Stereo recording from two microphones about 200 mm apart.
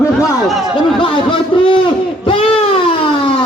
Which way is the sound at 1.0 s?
25° left (ahead or behind).